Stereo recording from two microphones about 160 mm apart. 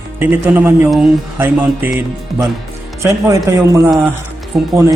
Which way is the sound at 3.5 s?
15° right (ahead or behind).